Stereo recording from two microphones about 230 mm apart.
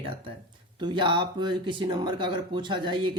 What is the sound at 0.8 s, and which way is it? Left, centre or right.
Speech, centre.